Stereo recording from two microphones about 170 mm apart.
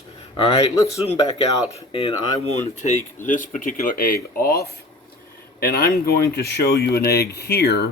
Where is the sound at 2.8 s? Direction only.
45° left (ahead or behind); by 7.9 s 75° left (ahead or behind).